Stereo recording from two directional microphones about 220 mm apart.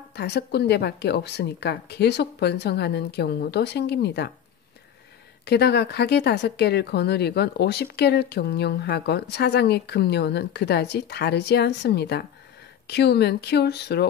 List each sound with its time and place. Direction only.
0.1 s speech: 50° left (ahead or behind)
5.4 s speech: 50° left (ahead or behind)